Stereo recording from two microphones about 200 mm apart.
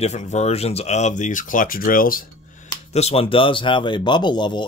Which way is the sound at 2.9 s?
30° left (ahead or behind).